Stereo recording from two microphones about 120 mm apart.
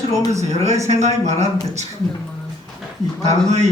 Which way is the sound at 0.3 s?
65° right (ahead or behind).